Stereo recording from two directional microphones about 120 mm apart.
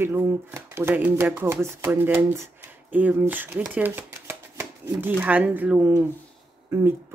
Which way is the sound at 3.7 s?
15° right (ahead or behind).